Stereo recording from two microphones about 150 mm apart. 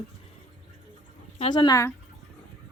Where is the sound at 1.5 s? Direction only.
30° left (ahead or behind).